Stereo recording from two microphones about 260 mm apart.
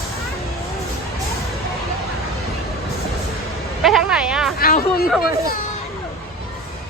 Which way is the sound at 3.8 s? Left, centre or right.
Centre.